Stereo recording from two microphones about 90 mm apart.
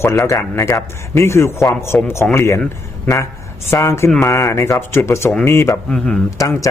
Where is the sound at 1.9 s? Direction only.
15° left (ahead or behind).